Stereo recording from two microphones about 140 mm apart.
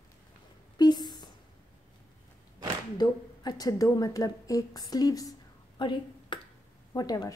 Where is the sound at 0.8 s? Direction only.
30° left (ahead or behind).